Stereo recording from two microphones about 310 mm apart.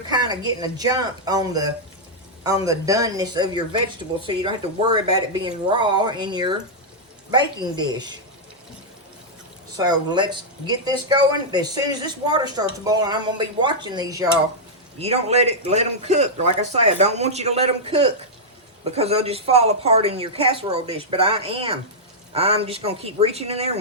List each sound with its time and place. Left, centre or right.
0.1 s speech: centre
9.7 s a man's voice: centre